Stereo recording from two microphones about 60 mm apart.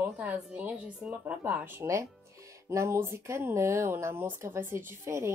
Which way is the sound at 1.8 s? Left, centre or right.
Right.